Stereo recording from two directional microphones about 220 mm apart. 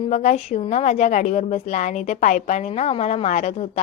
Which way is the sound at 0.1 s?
30° left (ahead or behind).